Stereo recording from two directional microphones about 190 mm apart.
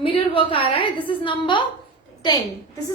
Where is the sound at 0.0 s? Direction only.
30° left (ahead or behind).